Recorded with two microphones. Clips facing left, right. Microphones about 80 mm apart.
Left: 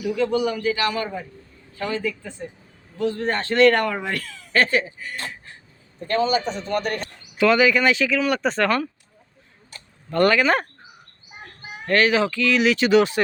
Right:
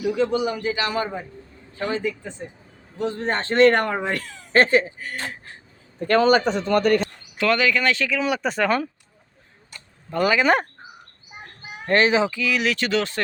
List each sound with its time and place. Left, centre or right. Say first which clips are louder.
0.3 s speech: left 1 dB; right
6.0 s speech: right 4 dB; right
7.3 s speech: left 3 dB; centre
10.1 s speech: left 2 dB; centre
10.4 s speech: right 1 dB; right
11.9 s speech: even; right; by 12.9 s centre
12.9 s speech: left 6 dB; centre